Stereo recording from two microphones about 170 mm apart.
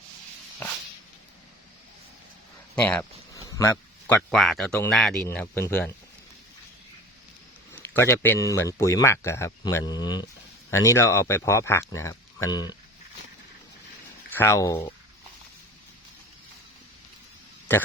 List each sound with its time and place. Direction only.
2.7 s speech: 10° left (ahead or behind)
7.7 s speech: 15° left (ahead or behind)
14.3 s speech: 15° left (ahead or behind)
17.7 s speech: 10° left (ahead or behind)